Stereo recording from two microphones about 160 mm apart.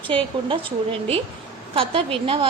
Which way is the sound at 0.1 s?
35° right (ahead or behind).